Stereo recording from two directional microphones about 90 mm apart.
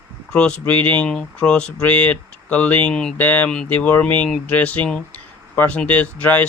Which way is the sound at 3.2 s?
20° left (ahead or behind).